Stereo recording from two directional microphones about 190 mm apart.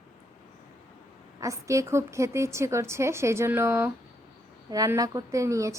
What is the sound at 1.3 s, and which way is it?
A woman's voice, 15° right (ahead or behind).